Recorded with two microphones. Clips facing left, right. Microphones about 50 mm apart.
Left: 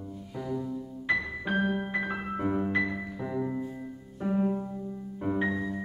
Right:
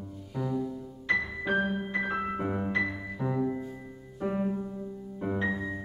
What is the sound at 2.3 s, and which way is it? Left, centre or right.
Music, centre.